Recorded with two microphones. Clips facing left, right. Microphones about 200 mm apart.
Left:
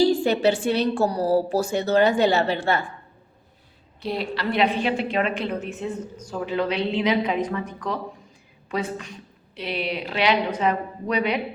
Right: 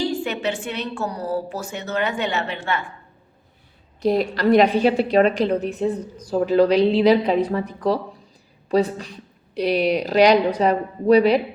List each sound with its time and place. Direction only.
0.0 s a woman's voice: 35° left (ahead or behind)
4.0 s a woman's voice: 45° right (ahead or behind)